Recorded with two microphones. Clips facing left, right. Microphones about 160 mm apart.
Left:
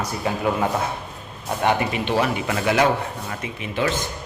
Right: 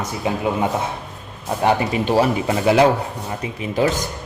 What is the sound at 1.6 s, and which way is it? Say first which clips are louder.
Speech: right 3 dB; 30° right (ahead or behind).